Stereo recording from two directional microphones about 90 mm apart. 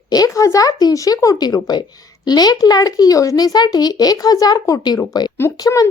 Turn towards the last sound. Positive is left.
turn(degrees=40)  # may be behind; listen again after turning